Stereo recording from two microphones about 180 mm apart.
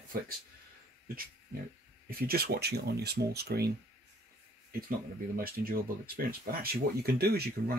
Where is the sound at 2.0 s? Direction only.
55° right (ahead or behind).